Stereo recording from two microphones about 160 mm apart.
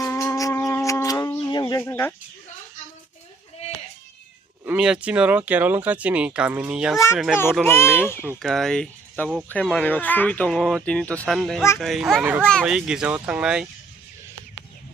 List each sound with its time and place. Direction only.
0.0 s shofar: 20° left (ahead or behind)
1.8 s speech: 15° left (ahead or behind)
4.6 s speech: 10° right (ahead or behind)
7.6 s speech: 15° left (ahead or behind)
8.4 s speech: centre (ahead or behind)
12.2 s speech: 10° right (ahead or behind)
12.5 s speech: centre (ahead or behind)